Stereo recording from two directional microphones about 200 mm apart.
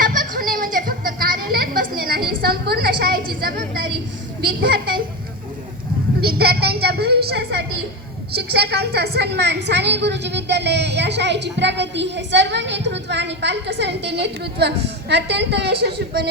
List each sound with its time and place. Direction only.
0.0 s children playing: 45° right (ahead or behind)
4.4 s a woman's voice: 50° right (ahead or behind)
6.2 s a sound: 50° right (ahead or behind)
8.4 s a woman's voice: 55° right (ahead or behind)